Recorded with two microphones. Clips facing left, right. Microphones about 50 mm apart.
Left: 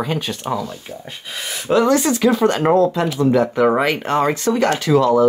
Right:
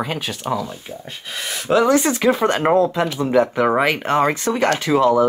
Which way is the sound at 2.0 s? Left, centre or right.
Right.